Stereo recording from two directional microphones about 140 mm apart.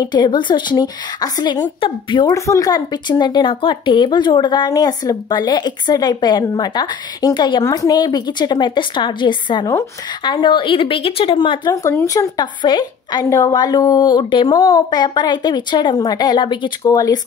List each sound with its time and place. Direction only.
0.0 s speech: 30° left (ahead or behind)
2.3 s speech: 20° left (ahead or behind)
11.7 s speech: 20° left (ahead or behind)